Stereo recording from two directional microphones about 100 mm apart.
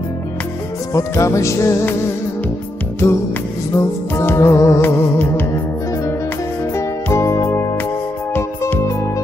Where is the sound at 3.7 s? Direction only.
25° left (ahead or behind).